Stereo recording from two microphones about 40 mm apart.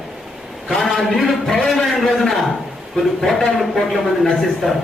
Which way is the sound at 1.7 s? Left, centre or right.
Centre.